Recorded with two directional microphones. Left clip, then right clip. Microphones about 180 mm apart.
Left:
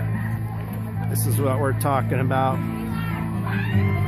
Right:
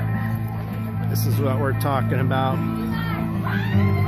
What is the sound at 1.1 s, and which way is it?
Speech, 15° left (ahead or behind).